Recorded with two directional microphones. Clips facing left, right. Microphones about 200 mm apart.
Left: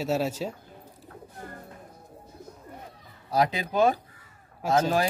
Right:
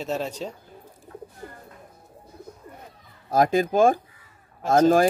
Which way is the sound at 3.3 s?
50° right (ahead or behind).